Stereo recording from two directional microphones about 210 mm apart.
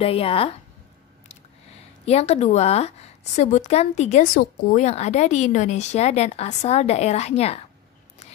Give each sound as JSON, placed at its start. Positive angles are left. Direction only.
{"t": 0.0, "sound": "a woman's voice", "side_deg": 25}
{"t": 2.0, "sound": "a woman's voice", "side_deg": 30}